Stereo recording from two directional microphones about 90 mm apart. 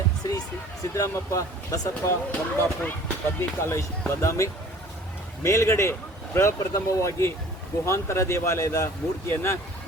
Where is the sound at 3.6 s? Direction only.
30° left (ahead or behind).